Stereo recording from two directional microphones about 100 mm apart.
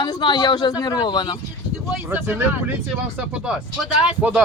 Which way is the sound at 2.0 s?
20° right (ahead or behind).